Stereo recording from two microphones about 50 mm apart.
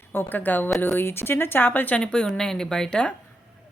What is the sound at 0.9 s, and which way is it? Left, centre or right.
A woman's voice, left.